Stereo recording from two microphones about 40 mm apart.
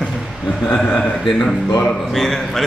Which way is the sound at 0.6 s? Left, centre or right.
Left.